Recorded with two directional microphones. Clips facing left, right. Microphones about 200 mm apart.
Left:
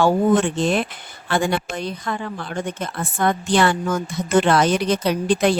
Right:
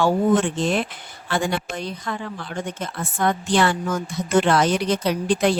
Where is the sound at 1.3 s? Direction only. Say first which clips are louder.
Left 3 dB; 55° left (ahead or behind).